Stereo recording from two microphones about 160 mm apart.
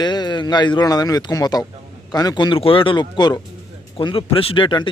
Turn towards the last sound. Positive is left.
turn(degrees=30)  # may be behind; listen again after turning